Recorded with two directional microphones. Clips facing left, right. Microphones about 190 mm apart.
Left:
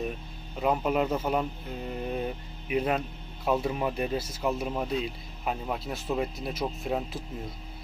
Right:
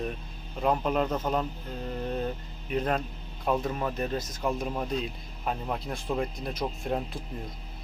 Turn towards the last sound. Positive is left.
turn(degrees=0)  # may be behind; listen again after turning